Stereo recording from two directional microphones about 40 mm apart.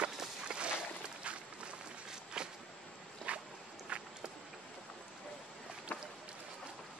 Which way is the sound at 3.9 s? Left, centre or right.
Right.